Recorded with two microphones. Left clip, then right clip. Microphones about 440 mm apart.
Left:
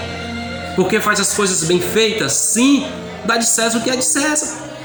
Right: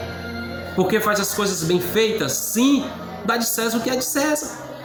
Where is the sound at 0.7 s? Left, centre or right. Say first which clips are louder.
Left 4 dB; right.